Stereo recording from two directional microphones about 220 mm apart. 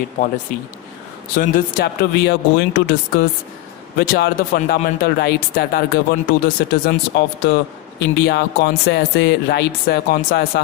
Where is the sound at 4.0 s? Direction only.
45° left (ahead or behind).